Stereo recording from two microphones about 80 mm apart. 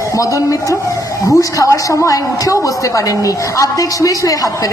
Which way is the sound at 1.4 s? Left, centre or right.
Left.